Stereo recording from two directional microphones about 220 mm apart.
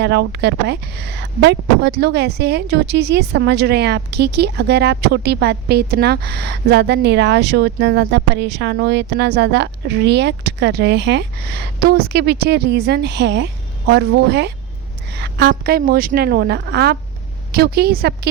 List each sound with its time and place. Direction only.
0.0 s speech: 50° right (ahead or behind)